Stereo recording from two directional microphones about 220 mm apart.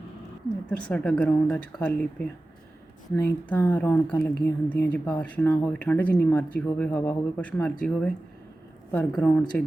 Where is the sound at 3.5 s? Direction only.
10° left (ahead or behind).